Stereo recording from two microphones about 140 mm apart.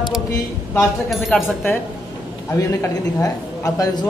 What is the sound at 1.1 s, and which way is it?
Speech, centre (ahead or behind).